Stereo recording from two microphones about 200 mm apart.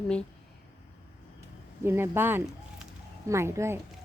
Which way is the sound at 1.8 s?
10° right (ahead or behind).